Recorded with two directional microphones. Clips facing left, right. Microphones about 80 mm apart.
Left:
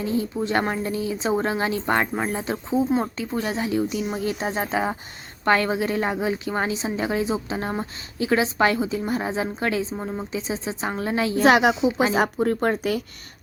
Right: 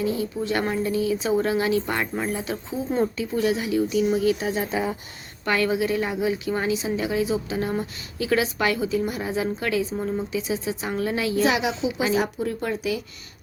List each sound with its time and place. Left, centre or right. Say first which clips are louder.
0.0 s a woman's voice: left 1 dB; left
11.4 s speech: left 10 dB; left